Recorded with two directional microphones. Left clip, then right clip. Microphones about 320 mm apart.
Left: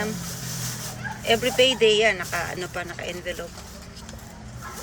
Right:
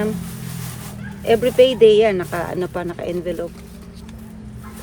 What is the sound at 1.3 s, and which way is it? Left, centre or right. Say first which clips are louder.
Speech: right 6 dB; centre.